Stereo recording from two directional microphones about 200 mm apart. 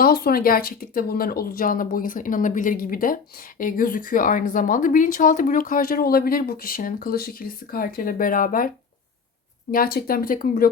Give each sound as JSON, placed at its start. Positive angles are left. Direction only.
{"t": 0.0, "sound": "speech", "side_deg": 50}
{"t": 9.7, "sound": "speech", "side_deg": 45}